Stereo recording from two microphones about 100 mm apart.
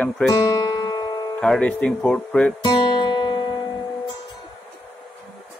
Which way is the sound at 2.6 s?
45° left (ahead or behind).